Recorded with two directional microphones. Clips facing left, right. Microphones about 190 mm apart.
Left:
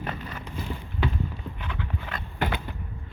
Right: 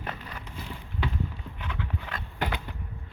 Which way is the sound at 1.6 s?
Centre (ahead or behind).